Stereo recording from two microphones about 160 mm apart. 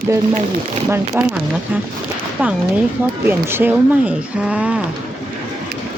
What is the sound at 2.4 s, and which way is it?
Speech, 10° right (ahead or behind).